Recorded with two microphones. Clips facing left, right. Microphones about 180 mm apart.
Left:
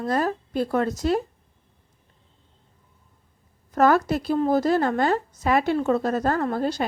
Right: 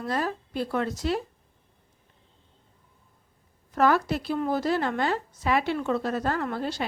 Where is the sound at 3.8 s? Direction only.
45° left (ahead or behind).